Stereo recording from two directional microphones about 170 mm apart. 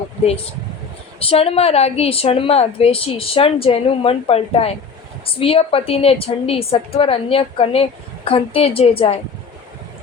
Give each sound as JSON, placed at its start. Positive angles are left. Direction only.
{"t": 1.2, "sound": "a woman's voice", "side_deg": 35}